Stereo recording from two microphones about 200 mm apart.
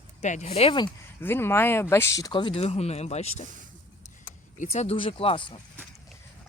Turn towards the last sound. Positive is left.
turn(degrees=25)  # may be behind; listen again after turning